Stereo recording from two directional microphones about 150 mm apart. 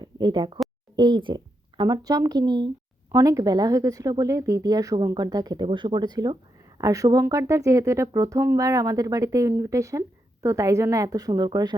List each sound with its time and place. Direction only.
0.0 s speech: 30° right (ahead or behind)